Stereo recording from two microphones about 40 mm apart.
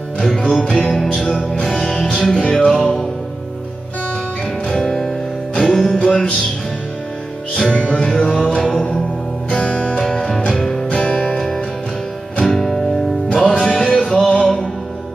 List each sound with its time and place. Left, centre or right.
0.5 s music: centre
2.7 s music: centre
4.6 s music: centre
7.6 s music: left
9.5 s music: left; by 10.9 s centre
10.9 s music: left
11.1 s music: centre
13.3 s music: left